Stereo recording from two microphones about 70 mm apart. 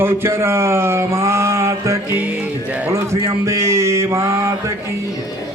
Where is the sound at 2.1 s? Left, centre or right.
Centre.